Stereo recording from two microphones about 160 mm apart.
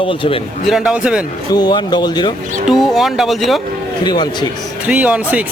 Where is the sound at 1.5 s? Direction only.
25° left (ahead or behind).